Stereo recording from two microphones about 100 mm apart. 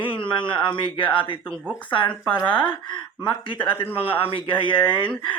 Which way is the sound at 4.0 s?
65° left (ahead or behind).